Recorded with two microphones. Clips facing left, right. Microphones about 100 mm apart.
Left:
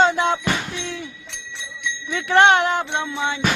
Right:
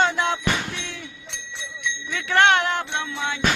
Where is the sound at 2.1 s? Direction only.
20° left (ahead or behind).